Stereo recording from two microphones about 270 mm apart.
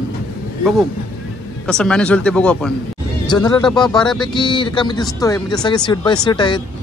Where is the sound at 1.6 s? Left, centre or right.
Centre.